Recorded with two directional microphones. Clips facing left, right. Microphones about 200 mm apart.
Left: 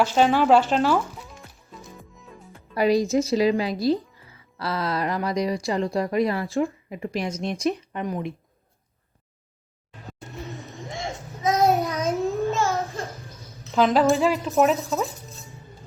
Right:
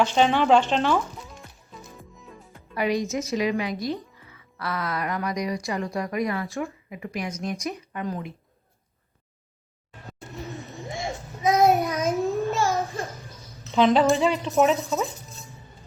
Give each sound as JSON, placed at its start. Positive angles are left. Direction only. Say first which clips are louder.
{"t": 0.0, "sound": "music", "louder": "left 1 dB", "side_deg": 5}
{"t": 2.7, "sound": "speech", "louder": "left 5 dB", "side_deg": 35}
{"t": 7.6, "sound": "speech", "louder": "left 7 dB", "side_deg": -15}
{"t": 7.9, "sound": "speech", "louder": "left 2 dB", "side_deg": 20}
{"t": 11.4, "sound": "child singing", "louder": "right 1 dB", "side_deg": -15}
{"t": 11.9, "sound": "a sound", "louder": "even", "side_deg": -10}
{"t": 12.3, "sound": "child singing", "louder": "left 1 dB", "side_deg": -15}
{"t": 12.6, "sound": "a sound", "louder": "right 1 dB", "side_deg": -15}
{"t": 13.1, "sound": "a woman's voice", "louder": "left 1 dB", "side_deg": 0}